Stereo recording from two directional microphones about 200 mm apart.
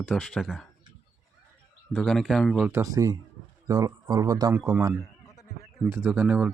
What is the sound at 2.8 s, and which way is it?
Speech, 15° right (ahead or behind).